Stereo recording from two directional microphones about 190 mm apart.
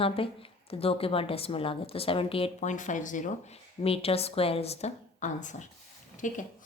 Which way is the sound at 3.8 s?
30° left (ahead or behind).